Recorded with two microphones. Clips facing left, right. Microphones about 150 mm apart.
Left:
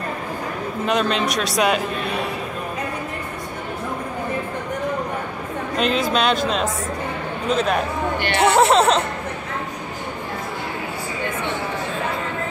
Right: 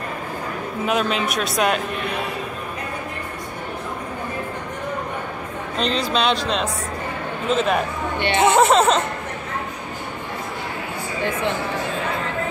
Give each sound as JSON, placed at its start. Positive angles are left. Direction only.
{"t": 0.8, "sound": "speech", "side_deg": -5}
{"t": 5.8, "sound": "speech", "side_deg": 5}
{"t": 8.2, "sound": "speech", "side_deg": -20}
{"t": 8.5, "sound": "speech", "side_deg": 0}